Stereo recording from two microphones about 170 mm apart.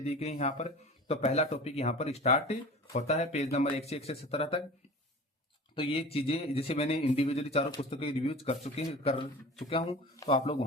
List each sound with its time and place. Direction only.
0.0 s speech: 40° left (ahead or behind)
5.7 s speech: 35° left (ahead or behind)